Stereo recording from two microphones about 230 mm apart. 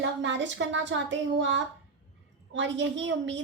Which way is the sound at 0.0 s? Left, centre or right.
Right.